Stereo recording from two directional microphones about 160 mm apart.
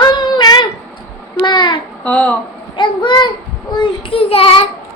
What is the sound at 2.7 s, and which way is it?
A child's voice, 30° left (ahead or behind).